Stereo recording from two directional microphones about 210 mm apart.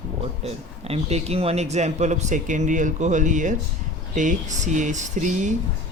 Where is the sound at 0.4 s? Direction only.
30° right (ahead or behind).